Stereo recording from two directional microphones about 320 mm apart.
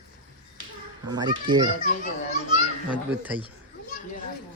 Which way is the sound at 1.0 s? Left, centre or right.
Centre.